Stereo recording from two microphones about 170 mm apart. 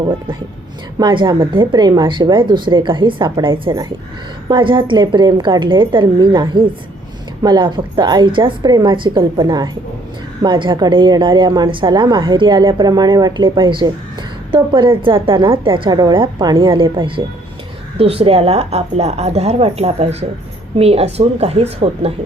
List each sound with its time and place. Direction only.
0.9 s a woman's voice: 25° right (ahead or behind)